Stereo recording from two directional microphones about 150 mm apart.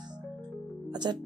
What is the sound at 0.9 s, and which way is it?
Music, 30° right (ahead or behind).